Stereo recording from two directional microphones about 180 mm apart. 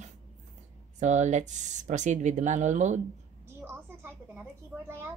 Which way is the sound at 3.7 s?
10° right (ahead or behind).